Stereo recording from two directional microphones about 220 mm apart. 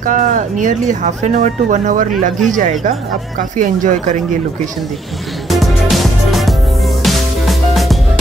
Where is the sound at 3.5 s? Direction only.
35° right (ahead or behind).